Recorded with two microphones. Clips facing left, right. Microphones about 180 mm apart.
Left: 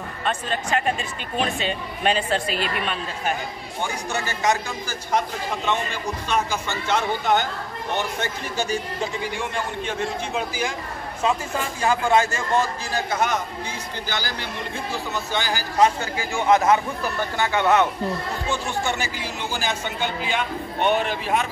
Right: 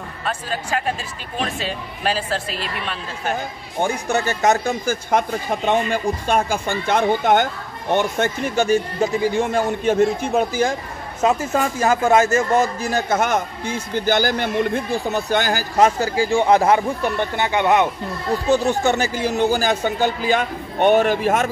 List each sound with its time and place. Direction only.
0.2 s speech: 5° right (ahead or behind)
3.8 s a man's voice: 45° right (ahead or behind); by 17.8 s 15° right (ahead or behind)
18.5 s a man's voice: 40° right (ahead or behind)